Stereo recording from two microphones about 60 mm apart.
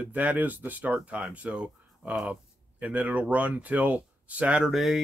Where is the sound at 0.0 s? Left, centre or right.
Right.